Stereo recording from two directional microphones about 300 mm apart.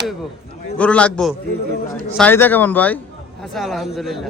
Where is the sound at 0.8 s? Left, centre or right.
Centre.